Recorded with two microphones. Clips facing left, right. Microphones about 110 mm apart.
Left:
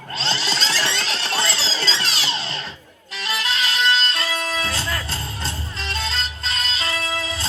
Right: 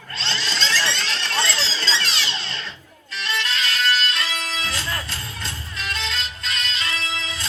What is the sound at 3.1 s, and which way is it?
Music, 45° left (ahead or behind).